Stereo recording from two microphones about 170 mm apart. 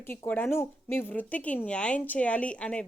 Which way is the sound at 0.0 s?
15° left (ahead or behind).